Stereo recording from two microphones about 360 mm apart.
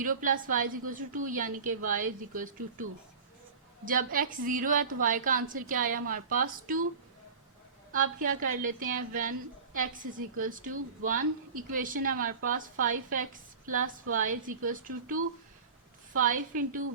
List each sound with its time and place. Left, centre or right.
0.0 s a woman's voice: right
3.8 s a woman's voice: right
7.9 s a woman's voice: right
10.3 s a woman's voice: right
16.1 s a woman's voice: right